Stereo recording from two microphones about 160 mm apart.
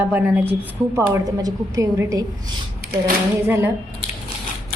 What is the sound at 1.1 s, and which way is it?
A woman's voice, 20° right (ahead or behind).